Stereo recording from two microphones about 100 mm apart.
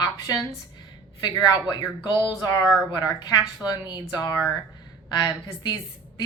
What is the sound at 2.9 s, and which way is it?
A woman's voice, 40° left (ahead or behind).